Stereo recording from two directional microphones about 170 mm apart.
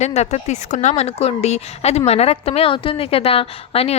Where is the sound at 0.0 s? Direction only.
40° left (ahead or behind).